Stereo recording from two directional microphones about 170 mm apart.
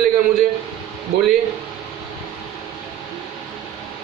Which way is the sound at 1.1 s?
90° right.